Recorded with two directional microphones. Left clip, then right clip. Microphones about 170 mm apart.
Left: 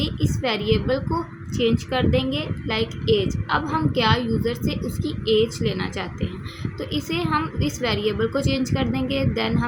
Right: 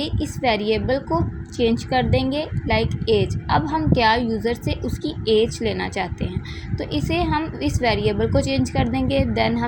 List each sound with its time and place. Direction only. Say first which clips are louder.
0.0 s a woman's voice: right 3 dB; 20° right (ahead or behind)